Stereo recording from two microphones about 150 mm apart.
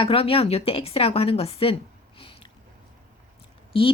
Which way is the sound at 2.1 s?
35° left (ahead or behind).